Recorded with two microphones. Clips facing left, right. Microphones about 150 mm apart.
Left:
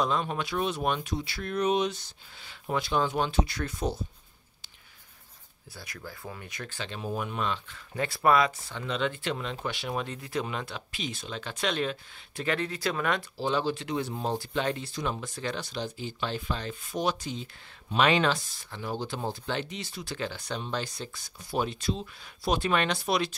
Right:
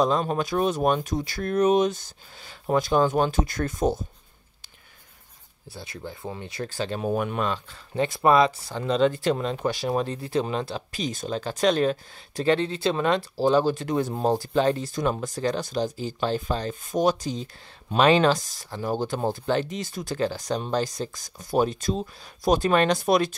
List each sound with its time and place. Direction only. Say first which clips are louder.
0.0 s speech: right 6 dB; 40° right (ahead or behind)
5.7 s speech: right 6 dB; 25° right (ahead or behind)
7.0 s speech: right 5 dB; 55° right (ahead or behind); by 8.0 s 35° right (ahead or behind)
8.0 s speech: right 5 dB; 25° right (ahead or behind)
13.4 s speech: right 10 dB; 40° right (ahead or behind)